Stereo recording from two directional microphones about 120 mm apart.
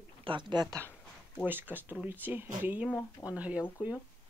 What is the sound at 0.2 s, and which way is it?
Speech, 40° right (ahead or behind).